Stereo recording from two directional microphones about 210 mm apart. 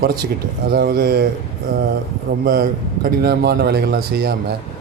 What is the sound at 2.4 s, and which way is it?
A man's voice, 45° right (ahead or behind).